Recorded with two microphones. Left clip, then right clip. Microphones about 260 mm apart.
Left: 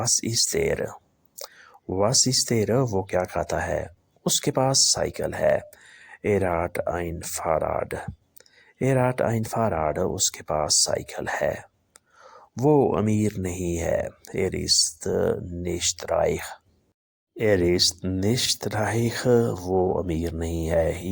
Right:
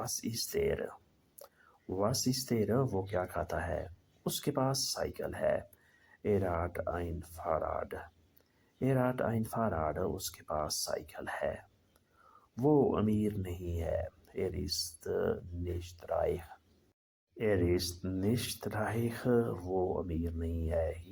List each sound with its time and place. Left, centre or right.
0.0 s speech: left